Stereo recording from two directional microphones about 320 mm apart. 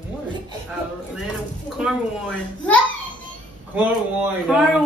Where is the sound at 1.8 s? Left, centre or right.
Centre.